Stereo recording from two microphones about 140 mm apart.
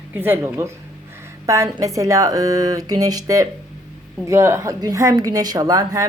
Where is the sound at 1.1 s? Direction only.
20° right (ahead or behind).